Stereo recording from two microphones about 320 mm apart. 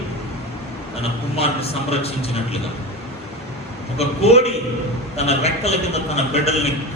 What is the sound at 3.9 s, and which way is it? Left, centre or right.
A man's voice, centre.